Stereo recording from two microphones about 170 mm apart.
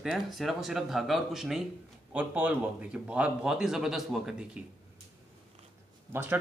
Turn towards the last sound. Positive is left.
turn(degrees=-15)  # may be behind; listen again after turning